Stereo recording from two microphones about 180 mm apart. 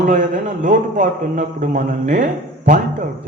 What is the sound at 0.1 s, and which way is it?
A man's voice, 45° right (ahead or behind).